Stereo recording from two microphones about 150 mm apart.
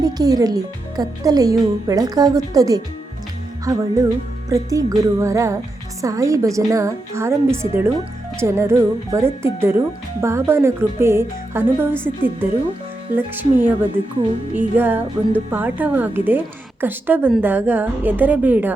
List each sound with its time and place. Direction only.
0.0 s a child's voice: 25° right (ahead or behind)
4.4 s a child's voice: 20° right (ahead or behind)